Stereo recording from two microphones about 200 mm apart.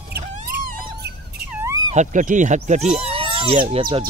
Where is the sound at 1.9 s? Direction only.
40° right (ahead or behind).